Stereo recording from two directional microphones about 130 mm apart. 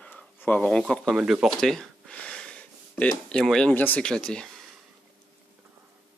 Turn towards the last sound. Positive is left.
turn(degrees=5)  # may be behind; listen again after turning